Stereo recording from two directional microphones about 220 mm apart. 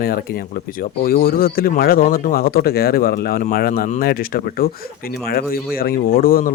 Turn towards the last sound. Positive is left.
turn(degrees=40)  # may be behind; listen again after turning